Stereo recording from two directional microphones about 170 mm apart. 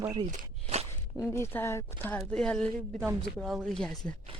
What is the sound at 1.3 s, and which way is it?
Speech, 15° left (ahead or behind).